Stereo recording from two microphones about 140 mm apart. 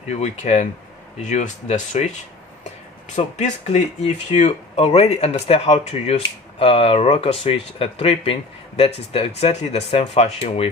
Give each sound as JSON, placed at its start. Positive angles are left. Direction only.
{"t": 0.1, "sound": "speech", "side_deg": 55}
{"t": 3.2, "sound": "speech", "side_deg": 60}